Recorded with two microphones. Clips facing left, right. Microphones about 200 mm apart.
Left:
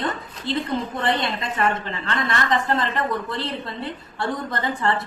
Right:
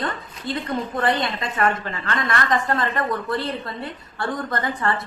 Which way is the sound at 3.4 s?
25° left (ahead or behind).